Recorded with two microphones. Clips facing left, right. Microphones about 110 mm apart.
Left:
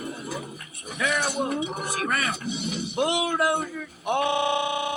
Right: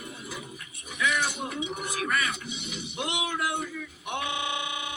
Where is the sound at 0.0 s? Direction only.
45° left (ahead or behind).